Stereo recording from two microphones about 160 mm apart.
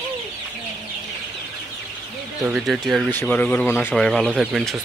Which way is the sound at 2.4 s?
5° right (ahead or behind).